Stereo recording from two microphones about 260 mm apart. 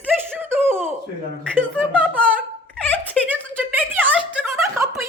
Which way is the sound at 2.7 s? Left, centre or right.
Centre.